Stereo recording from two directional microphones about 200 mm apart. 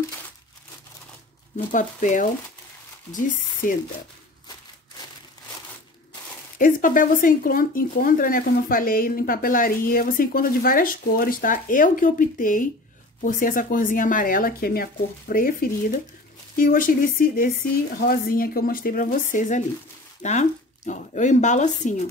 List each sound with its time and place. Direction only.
1.7 s speech: 40° left (ahead or behind)
6.6 s speech: 45° left (ahead or behind)